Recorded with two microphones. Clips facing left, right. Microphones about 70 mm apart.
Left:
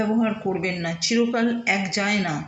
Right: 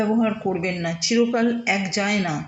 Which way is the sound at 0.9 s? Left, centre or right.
Left.